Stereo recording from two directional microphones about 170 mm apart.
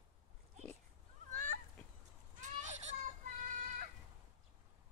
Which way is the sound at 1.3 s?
50° right (ahead or behind).